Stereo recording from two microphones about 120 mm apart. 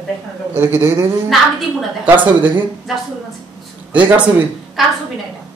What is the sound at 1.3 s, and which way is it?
Speech, centre (ahead or behind).